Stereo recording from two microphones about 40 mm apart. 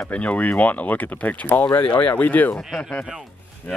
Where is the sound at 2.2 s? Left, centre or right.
Left.